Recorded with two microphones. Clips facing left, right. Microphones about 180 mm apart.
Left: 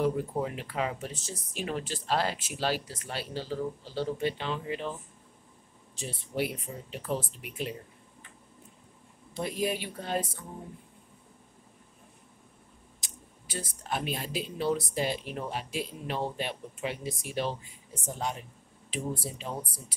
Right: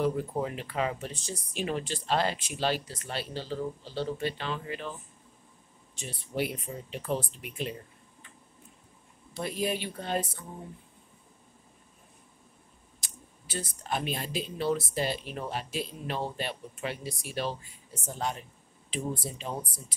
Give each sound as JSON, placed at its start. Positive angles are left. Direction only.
{"t": 0.3, "sound": "speech", "side_deg": 0}
{"t": 6.3, "sound": "speech", "side_deg": 5}
{"t": 9.3, "sound": "speech", "side_deg": 15}
{"t": 13.0, "sound": "speech", "side_deg": 10}
{"t": 18.9, "sound": "speech", "side_deg": 5}